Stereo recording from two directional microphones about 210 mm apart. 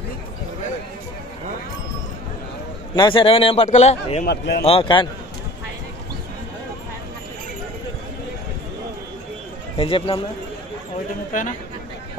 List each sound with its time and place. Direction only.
3.0 s a man's voice: 25° left (ahead or behind)
4.3 s speech: 50° left (ahead or behind)
4.6 s a man's voice: 25° left (ahead or behind)
9.8 s a man's voice: 25° left (ahead or behind)
11.3 s speech: 40° left (ahead or behind)